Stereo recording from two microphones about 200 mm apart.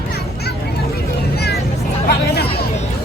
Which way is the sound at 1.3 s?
55° left (ahead or behind).